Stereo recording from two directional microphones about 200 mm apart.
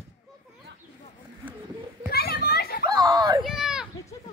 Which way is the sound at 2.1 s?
50° left (ahead or behind).